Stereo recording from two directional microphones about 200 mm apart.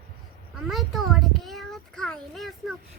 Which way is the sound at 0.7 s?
Centre (ahead or behind).